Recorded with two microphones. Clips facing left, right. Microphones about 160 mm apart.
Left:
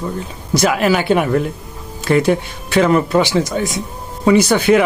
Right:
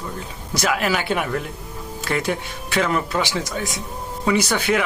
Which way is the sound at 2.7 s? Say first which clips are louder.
Left 8 dB; 40° left (ahead or behind).